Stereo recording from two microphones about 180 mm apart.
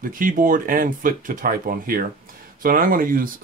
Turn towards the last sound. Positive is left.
turn(degrees=-50)  # may be behind; listen again after turning